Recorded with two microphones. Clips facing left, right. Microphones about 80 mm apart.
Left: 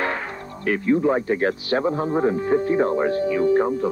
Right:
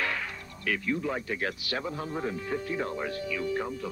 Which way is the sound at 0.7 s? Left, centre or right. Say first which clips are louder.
Left 11 dB; left.